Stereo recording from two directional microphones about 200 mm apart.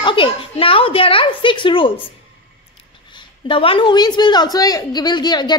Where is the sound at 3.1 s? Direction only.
25° left (ahead or behind).